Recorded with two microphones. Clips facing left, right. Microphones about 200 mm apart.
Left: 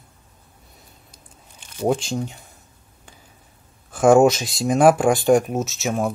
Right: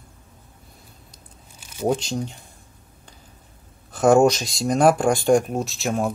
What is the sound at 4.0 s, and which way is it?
Speech, 5° left (ahead or behind).